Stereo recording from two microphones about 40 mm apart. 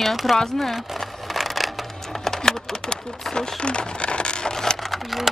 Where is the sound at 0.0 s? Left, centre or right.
Centre.